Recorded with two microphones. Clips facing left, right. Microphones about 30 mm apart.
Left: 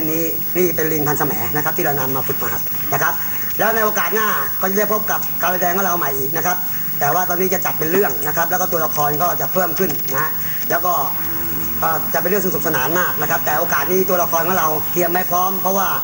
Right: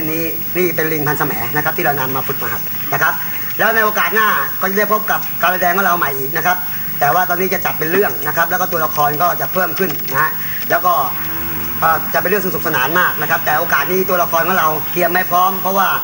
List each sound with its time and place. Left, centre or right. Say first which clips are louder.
0.1 s a man's voice: right 1 dB; right